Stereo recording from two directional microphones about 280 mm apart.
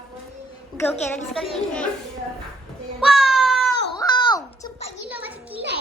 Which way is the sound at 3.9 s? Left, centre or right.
Centre.